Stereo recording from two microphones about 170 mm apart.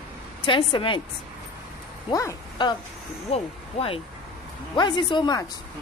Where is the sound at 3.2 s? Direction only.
35° left (ahead or behind).